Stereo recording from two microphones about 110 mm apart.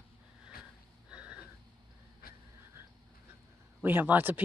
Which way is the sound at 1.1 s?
10° right (ahead or behind).